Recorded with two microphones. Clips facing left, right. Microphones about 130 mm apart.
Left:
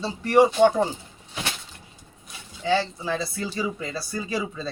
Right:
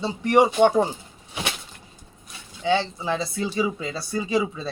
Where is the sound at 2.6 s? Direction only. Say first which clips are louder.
Right 1 dB; 20° right (ahead or behind).